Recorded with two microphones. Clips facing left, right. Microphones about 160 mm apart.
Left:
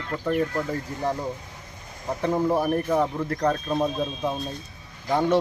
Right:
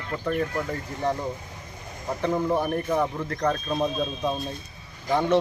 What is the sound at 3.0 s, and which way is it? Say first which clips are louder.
A man's voice: left 2 dB; 15° left (ahead or behind).